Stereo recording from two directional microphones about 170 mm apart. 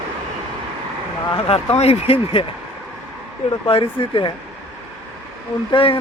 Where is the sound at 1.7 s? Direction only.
40° left (ahead or behind).